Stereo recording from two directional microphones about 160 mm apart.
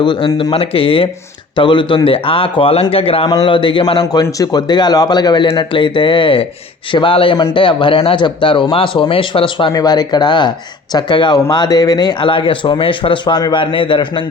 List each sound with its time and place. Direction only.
0.0 s speech: 30° left (ahead or behind)